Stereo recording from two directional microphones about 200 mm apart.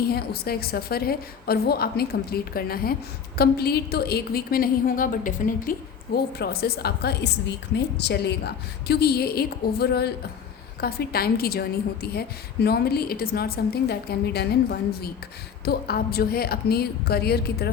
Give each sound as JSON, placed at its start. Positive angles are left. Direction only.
{"t": 0.1, "sound": "a woman's voice", "side_deg": 50}